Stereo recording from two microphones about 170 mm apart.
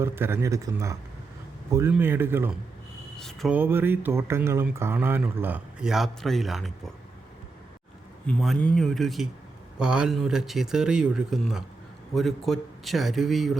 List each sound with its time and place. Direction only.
0.0 s speech: 15° right (ahead or behind)
3.2 s speech: centre (ahead or behind)
3.5 s speech: 10° right (ahead or behind)
8.3 s speech: 5° left (ahead or behind)